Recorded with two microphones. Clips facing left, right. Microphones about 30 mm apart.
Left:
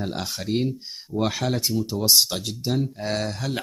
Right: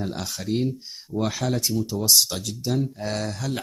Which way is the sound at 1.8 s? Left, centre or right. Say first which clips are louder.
Left 2 dB; left.